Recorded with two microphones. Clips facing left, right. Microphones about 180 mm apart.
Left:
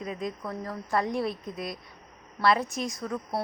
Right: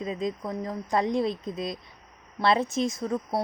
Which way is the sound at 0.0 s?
20° right (ahead or behind).